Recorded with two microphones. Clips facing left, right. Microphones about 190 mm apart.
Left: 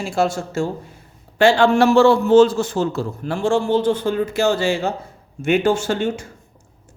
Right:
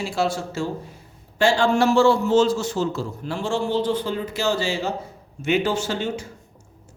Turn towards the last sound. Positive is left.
turn(degrees=50)  # may be behind; listen again after turning